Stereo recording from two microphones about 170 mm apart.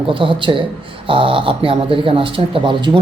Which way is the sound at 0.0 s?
30° right (ahead or behind).